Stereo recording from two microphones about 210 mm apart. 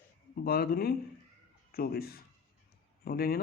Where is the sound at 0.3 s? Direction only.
45° left (ahead or behind).